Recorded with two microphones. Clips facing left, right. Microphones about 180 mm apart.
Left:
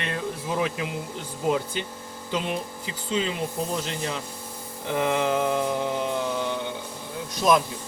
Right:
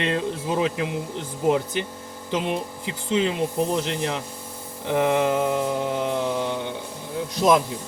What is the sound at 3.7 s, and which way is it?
Speech, 20° right (ahead or behind).